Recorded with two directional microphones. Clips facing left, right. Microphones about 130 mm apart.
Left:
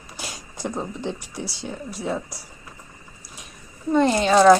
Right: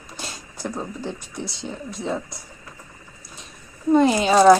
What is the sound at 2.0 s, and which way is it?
Speech, 10° left (ahead or behind).